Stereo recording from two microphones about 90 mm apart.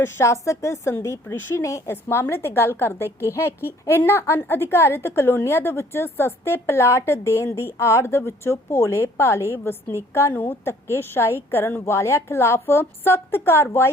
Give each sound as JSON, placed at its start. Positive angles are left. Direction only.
{"t": 0.0, "sound": "a woman's voice", "side_deg": 30}